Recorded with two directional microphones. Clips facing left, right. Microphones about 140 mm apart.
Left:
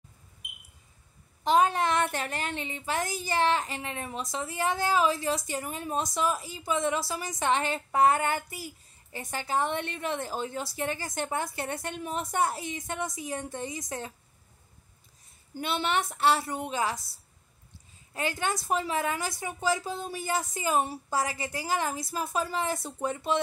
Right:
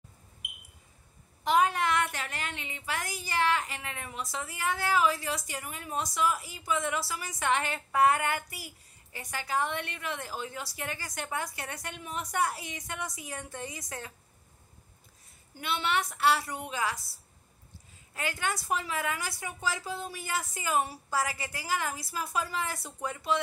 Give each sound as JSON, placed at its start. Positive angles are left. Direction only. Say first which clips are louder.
{"t": 1.4, "sound": "a woman's voice", "louder": "left 2 dB", "side_deg": 30}
{"t": 15.6, "sound": "a woman's voice", "louder": "left 2 dB", "side_deg": 30}
{"t": 18.1, "sound": "a woman's voice", "louder": "left 3 dB", "side_deg": 25}